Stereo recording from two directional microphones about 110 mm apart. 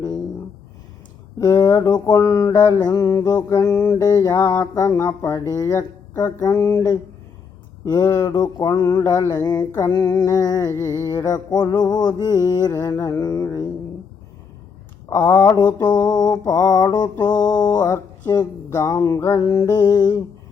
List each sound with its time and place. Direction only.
1.4 s mantra: 35° left (ahead or behind)
15.1 s mantra: 30° left (ahead or behind)